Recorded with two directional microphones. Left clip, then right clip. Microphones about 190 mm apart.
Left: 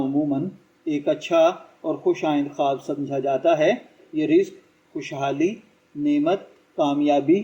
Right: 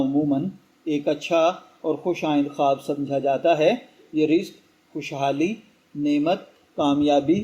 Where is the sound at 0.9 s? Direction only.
40° right (ahead or behind).